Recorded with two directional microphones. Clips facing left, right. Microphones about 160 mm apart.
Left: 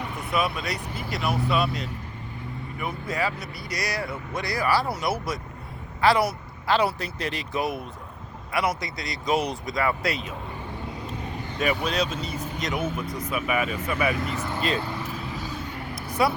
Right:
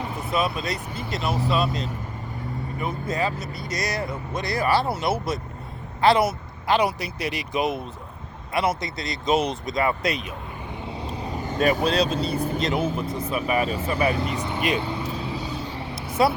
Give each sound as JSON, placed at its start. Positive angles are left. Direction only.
{"t": 0.3, "sound": "speech", "side_deg": -25}
{"t": 10.9, "sound": "speech", "side_deg": -30}
{"t": 14.3, "sound": "vehicle", "side_deg": -15}